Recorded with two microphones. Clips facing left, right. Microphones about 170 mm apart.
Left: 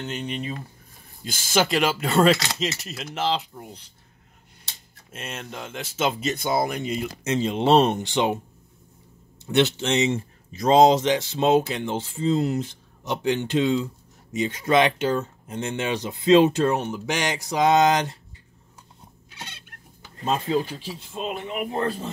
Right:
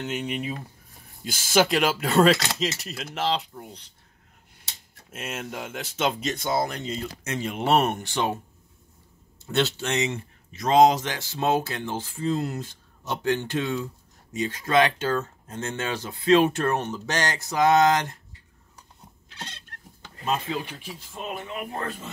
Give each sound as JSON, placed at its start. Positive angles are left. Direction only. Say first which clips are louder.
{"t": 0.0, "sound": "speech", "louder": "right 1 dB", "side_deg": -5}
{"t": 5.1, "sound": "speech", "louder": "right 2 dB", "side_deg": -5}
{"t": 7.2, "sound": "speech", "louder": "left 5 dB", "side_deg": 25}
{"t": 9.5, "sound": "speech", "louder": "left 4 dB", "side_deg": 20}
{"t": 20.2, "sound": "speech", "louder": "left 4 dB", "side_deg": 30}
{"t": 21.8, "sound": "speech", "louder": "left 7 dB", "side_deg": 35}